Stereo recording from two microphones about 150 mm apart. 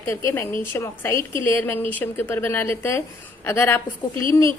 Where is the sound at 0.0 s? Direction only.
20° left (ahead or behind).